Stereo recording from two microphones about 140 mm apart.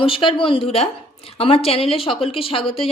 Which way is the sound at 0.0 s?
40° left (ahead or behind).